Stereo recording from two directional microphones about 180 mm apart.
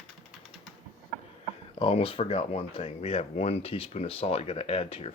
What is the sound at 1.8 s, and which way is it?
Speech, 30° left (ahead or behind).